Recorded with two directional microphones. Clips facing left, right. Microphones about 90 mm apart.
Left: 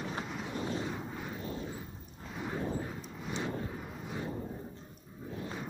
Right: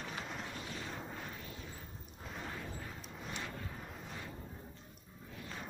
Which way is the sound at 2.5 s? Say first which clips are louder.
Left 10 dB; 30° left (ahead or behind).